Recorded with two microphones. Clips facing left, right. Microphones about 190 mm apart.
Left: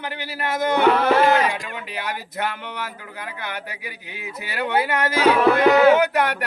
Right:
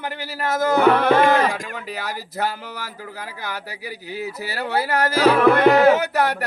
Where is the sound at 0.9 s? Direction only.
60° right (ahead or behind); by 2.8 s 35° right (ahead or behind).